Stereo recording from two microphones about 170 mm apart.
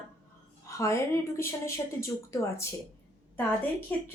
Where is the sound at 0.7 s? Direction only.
15° left (ahead or behind).